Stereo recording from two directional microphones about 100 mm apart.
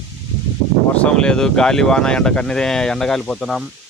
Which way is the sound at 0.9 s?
10° left (ahead or behind).